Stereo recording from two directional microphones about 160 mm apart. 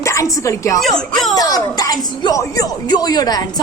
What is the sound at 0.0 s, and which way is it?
Speech, 20° left (ahead or behind).